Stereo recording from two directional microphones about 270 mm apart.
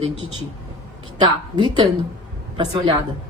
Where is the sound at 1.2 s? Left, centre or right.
Centre.